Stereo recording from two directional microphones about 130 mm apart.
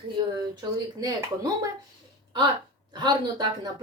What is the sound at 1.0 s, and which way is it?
Speech, 30° right (ahead or behind).